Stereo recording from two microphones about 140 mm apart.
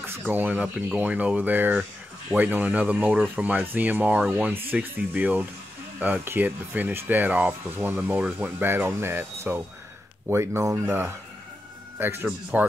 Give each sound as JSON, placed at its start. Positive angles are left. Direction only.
{"t": 0.3, "sound": "speech", "side_deg": -10}